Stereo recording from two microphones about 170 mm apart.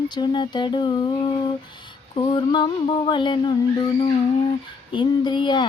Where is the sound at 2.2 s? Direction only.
30° left (ahead or behind).